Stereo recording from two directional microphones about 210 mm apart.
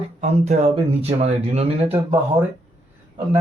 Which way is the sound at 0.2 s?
30° right (ahead or behind).